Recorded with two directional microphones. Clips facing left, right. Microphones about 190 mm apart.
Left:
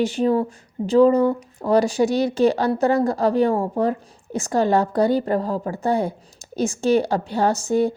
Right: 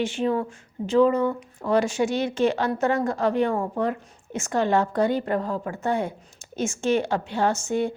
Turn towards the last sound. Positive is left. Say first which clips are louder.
# left 4 dB
turn(degrees=35)  # may be behind; listen again after turning